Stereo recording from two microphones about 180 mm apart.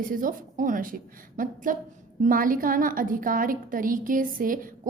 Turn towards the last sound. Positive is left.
turn(degrees=-50)  # may be behind; listen again after turning